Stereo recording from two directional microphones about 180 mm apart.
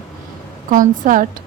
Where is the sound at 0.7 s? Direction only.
45° right (ahead or behind).